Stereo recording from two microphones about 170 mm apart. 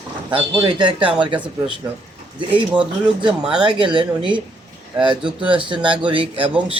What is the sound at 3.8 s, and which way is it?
Speech, 30° right (ahead or behind).